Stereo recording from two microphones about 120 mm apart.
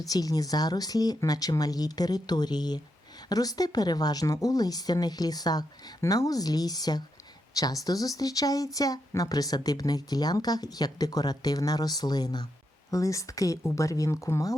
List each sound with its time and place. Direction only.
0.0 s speech: 30° left (ahead or behind)